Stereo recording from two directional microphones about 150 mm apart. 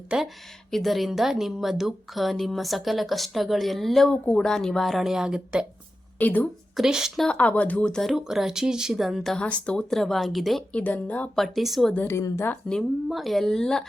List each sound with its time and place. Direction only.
0.1 s speech: 5° right (ahead or behind)
6.1 s speech: 10° left (ahead or behind)
6.7 s speech: 5° right (ahead or behind)
12.0 s speech: 15° left (ahead or behind)
12.6 s speech: centre (ahead or behind)